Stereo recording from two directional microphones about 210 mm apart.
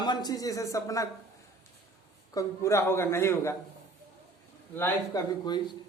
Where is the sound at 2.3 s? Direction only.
15° left (ahead or behind).